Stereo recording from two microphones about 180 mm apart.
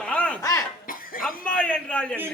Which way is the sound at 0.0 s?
5° left (ahead or behind).